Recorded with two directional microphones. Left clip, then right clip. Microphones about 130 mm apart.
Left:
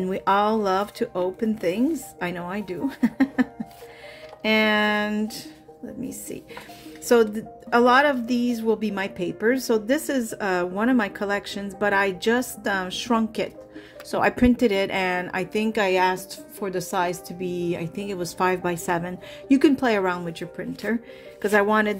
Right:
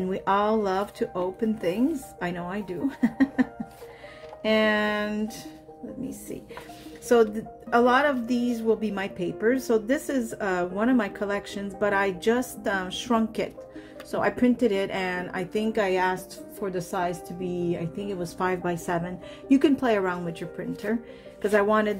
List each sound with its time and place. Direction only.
0.0 s a woman's voice: 35° left (ahead or behind)
7.1 s a woman's voice: 40° left (ahead or behind)
14.1 s a woman's voice: 55° left (ahead or behind); by 21.9 s 35° left (ahead or behind)